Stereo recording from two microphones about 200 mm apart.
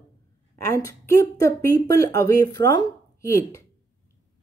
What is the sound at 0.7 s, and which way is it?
Speech, 15° left (ahead or behind).